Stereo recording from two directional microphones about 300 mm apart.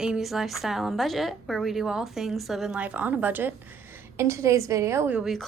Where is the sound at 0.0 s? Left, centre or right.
Centre.